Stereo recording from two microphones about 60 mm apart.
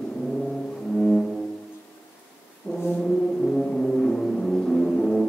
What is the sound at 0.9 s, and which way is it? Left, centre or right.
Music, centre.